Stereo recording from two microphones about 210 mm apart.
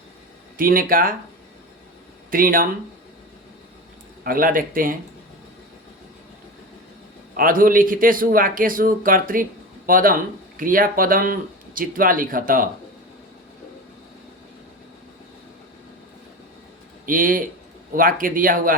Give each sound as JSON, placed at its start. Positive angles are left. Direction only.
{"t": 0.5, "sound": "speech", "side_deg": -40}
{"t": 2.3, "sound": "speech", "side_deg": -40}
{"t": 4.2, "sound": "a man's voice", "side_deg": -45}
{"t": 7.3, "sound": "a man's voice", "side_deg": -40}
{"t": 17.1, "sound": "a man's voice", "side_deg": -40}